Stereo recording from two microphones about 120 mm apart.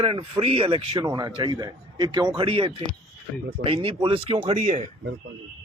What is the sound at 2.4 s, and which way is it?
Speech, 50° right (ahead or behind).